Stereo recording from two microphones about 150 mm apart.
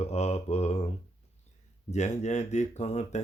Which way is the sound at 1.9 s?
50° left (ahead or behind).